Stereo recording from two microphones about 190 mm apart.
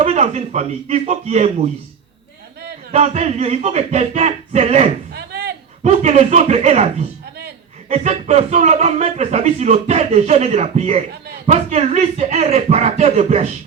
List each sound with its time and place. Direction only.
0.0 s speech: 35° right (ahead or behind)
2.9 s speech: 35° right (ahead or behind)
5.1 s a sound: 60° right (ahead or behind)
5.8 s speech: 35° right (ahead or behind)